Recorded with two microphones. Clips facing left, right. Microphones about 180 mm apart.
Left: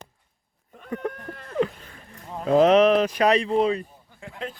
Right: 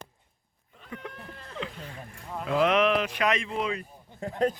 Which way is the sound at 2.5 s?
35° left (ahead or behind).